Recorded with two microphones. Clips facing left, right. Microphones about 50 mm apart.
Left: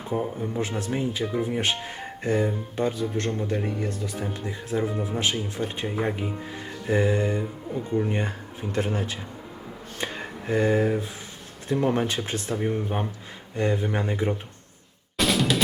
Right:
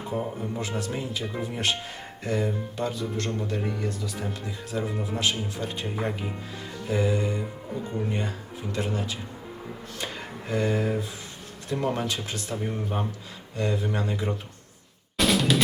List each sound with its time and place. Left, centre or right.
0.1 s speech: centre
0.6 s speech: left
6.8 s speech: left
8.7 s speech: left
10.5 s speech: left
15.2 s drum: centre